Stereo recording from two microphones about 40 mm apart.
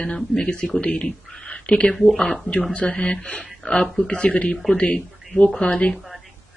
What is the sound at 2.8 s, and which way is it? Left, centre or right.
A woman's voice, left.